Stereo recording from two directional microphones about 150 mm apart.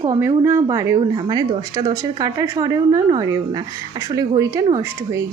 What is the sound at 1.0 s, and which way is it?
A woman's voice, 30° right (ahead or behind).